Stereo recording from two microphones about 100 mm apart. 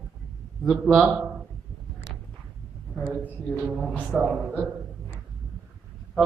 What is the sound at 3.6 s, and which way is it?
A man's voice, 15° right (ahead or behind).